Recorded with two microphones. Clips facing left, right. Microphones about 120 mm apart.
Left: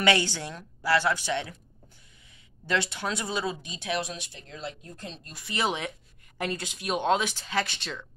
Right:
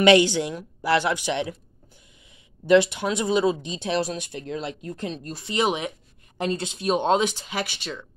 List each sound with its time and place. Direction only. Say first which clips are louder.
0.0 s speech: right 9 dB; 20° right (ahead or behind)
2.6 s speech: right 11 dB; 15° right (ahead or behind); by 5.2 s 70° right (ahead or behind)
5.3 s speech: right 5 dB; 25° right (ahead or behind)
7.6 s speech: right 4 dB; 5° right (ahead or behind)